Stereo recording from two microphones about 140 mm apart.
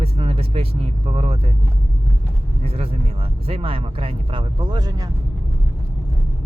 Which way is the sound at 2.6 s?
45° right (ahead or behind).